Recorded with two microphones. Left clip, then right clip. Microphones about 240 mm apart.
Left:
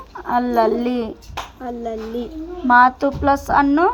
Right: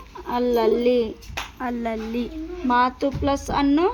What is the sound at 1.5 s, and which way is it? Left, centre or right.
Speech, right.